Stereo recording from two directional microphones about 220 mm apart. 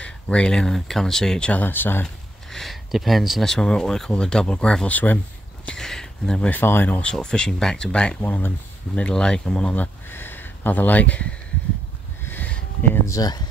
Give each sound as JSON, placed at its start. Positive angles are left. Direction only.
{"t": 0.0, "sound": "speech", "side_deg": 5}
{"t": 12.3, "sound": "a sound", "side_deg": 5}
{"t": 13.1, "sound": "speech", "side_deg": 15}